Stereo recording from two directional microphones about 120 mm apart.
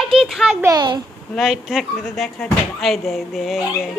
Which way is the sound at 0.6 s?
35° right (ahead or behind).